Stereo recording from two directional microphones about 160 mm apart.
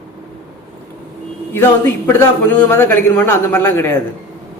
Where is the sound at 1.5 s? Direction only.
15° left (ahead or behind).